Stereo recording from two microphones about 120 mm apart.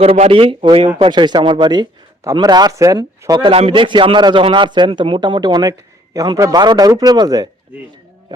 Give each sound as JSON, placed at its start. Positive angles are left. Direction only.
{"t": 0.0, "sound": "a man's voice", "side_deg": -55}
{"t": 3.5, "sound": "a man's voice", "side_deg": -50}